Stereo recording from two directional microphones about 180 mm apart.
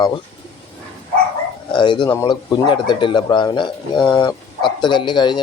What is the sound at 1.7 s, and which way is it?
Speech, 25° left (ahead or behind).